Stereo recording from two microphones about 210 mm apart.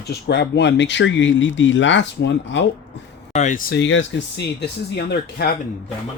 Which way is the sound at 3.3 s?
35° left (ahead or behind).